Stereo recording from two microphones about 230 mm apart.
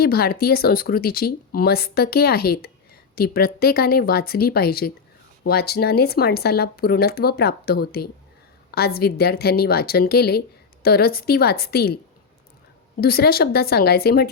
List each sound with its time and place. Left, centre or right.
0.0 s speech: left
13.0 s speech: left